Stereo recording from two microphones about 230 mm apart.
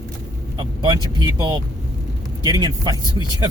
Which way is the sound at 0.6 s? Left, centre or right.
Centre.